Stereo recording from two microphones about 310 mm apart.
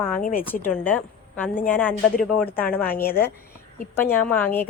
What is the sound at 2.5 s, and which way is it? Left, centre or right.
A woman's voice, centre.